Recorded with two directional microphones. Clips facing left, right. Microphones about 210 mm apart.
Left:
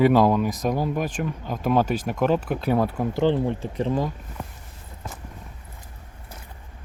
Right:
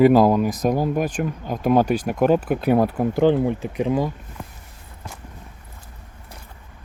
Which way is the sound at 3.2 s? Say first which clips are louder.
Right 4 dB; 10° right (ahead or behind).